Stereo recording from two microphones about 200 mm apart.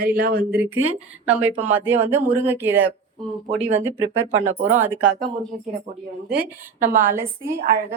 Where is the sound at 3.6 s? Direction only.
35° right (ahead or behind).